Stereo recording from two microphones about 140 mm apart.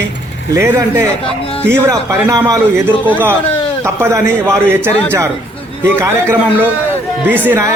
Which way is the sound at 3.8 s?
20° right (ahead or behind).